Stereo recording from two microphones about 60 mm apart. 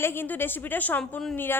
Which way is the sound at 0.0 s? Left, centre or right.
Left.